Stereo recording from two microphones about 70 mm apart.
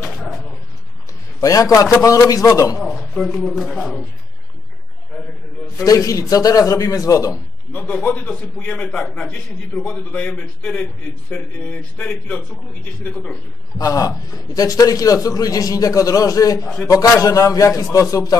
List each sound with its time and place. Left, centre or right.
0.0 s dog: centre
1.4 s a man's voice: left
2.8 s a man's voice: centre
5.9 s a man's voice: left
8.0 s a man's voice: left
10.8 s a man's voice: left
13.7 s a man's voice: left